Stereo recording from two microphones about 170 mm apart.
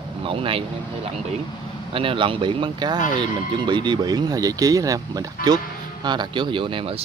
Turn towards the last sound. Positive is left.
turn(degrees=-30)  # may be behind; listen again after turning